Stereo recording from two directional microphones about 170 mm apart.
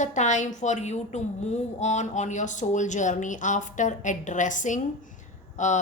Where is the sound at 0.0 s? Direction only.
45° left (ahead or behind).